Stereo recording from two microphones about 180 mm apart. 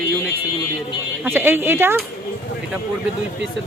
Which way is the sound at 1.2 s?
10° right (ahead or behind).